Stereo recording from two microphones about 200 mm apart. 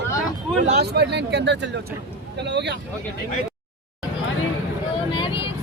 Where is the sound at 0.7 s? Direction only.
55° right (ahead or behind).